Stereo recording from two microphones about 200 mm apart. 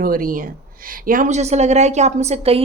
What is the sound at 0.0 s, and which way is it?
A woman's voice, 45° right (ahead or behind).